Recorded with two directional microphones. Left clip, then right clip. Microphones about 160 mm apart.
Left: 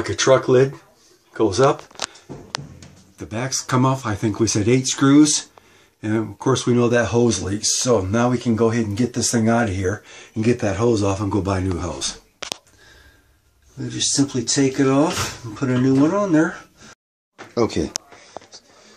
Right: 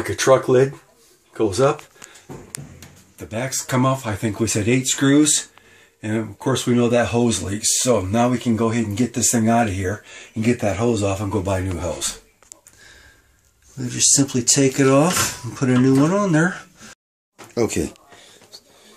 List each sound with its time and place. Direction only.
0.0 s speech: 5° left (ahead or behind)
3.3 s speech: 5° left (ahead or behind)
13.9 s speech: 30° right (ahead or behind)
17.6 s speech: 10° right (ahead or behind)